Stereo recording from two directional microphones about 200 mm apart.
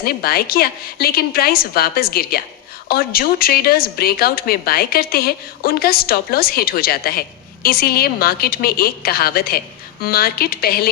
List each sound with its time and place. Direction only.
0.0 s a woman's voice: 50° left (ahead or behind)